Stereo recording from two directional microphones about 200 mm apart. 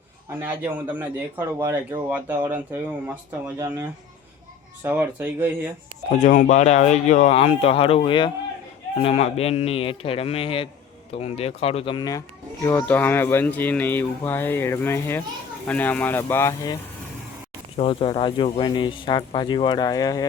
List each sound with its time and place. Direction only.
0.3 s a man's voice: 10° right (ahead or behind)
6.1 s speech: 40° left (ahead or behind); by 12.2 s 20° left (ahead or behind)
12.9 s speech: 10° left (ahead or behind)
17.7 s speech: 25° left (ahead or behind)